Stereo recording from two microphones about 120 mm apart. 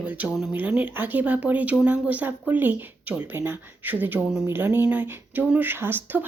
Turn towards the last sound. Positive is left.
turn(degrees=-15)  # may be behind; listen again after turning